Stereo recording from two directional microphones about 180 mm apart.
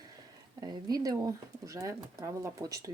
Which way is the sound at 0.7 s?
20° right (ahead or behind).